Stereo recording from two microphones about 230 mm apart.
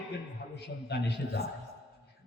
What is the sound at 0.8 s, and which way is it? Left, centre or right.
Speech, left.